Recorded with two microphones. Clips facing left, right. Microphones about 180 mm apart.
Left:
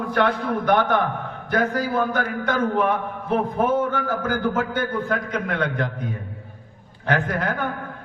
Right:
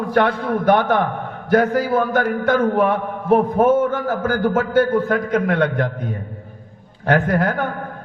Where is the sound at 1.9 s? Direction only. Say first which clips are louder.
Right 5 dB; 45° right (ahead or behind).